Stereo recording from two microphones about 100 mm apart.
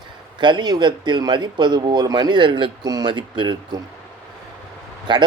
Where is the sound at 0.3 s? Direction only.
50° right (ahead or behind).